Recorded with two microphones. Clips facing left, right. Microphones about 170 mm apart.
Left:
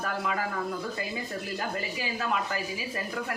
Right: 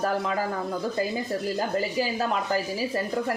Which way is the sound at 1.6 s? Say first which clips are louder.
Right 8 dB; 35° right (ahead or behind).